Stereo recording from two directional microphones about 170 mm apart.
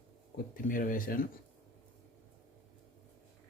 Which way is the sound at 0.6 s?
55° left (ahead or behind).